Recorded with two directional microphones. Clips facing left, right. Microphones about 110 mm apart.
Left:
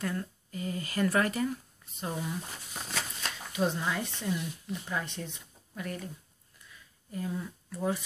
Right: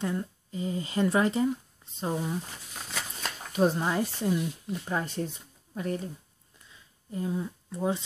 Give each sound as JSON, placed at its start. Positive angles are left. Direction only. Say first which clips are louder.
{"t": 0.0, "sound": "speech", "louder": "right 3 dB", "side_deg": -20}
{"t": 3.5, "sound": "speech", "louder": "right 5 dB", "side_deg": -40}
{"t": 6.7, "sound": "a sound", "louder": "right 3 dB", "side_deg": -25}